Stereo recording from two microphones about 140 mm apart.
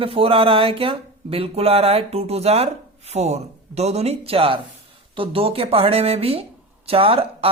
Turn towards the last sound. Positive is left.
turn(degrees=-45)  # may be behind; listen again after turning